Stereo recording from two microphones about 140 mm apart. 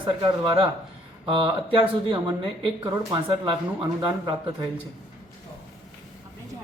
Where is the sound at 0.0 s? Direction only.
35° right (ahead or behind).